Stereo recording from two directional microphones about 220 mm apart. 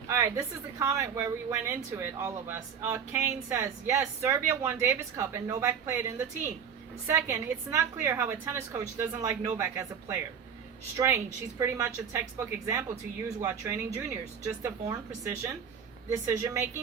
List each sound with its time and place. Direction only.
0.1 s a woman's voice: 15° right (ahead or behind)
13.2 s a woman's voice: 15° right (ahead or behind)